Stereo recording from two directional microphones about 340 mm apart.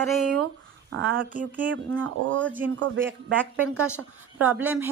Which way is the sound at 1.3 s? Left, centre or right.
Centre.